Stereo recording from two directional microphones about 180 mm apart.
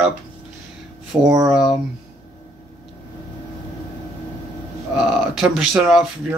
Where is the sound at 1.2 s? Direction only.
20° right (ahead or behind).